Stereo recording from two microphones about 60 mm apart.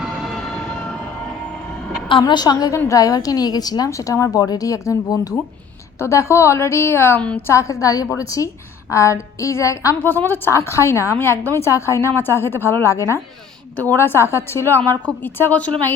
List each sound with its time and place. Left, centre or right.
2.2 s a woman's voice: left
2.7 s a woman's voice: left
3.8 s a woman's voice: left
6.0 s a woman's voice: left
7.2 s a woman's voice: centre
7.5 s a woman's voice: left
8.1 s a woman's voice: left
10.0 s a woman's voice: left
10.5 s a woman's voice: left
13.9 s a woman's voice: left
14.8 s a woman's voice: left